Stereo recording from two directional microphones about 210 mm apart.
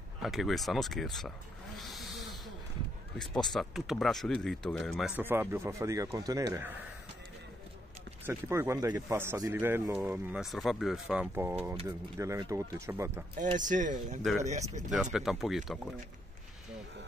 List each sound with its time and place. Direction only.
0.2 s speech: centre (ahead or behind)
1.8 s snake: centre (ahead or behind)
3.4 s speech: centre (ahead or behind)
8.3 s speech: 15° right (ahead or behind)
13.6 s speech: 35° right (ahead or behind)
15.1 s speech: centre (ahead or behind)